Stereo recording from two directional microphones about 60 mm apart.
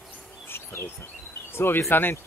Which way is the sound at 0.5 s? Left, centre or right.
Left.